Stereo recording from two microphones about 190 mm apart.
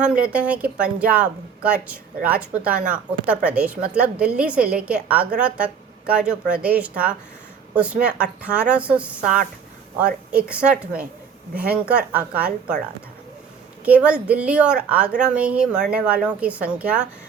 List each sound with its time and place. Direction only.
0.0 s speech: 5° right (ahead or behind)
10.3 s speech: 5° right (ahead or behind)
13.8 s speech: 5° right (ahead or behind)